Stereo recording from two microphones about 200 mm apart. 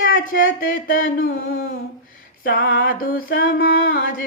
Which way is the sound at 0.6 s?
45° left (ahead or behind).